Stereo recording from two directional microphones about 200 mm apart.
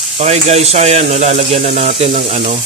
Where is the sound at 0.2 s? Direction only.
35° right (ahead or behind).